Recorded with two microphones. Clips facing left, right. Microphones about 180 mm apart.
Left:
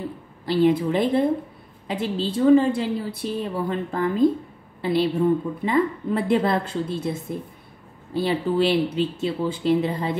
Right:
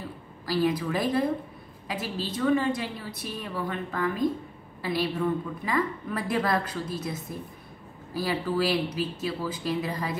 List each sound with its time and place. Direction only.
0.5 s a woman's voice: 25° left (ahead or behind)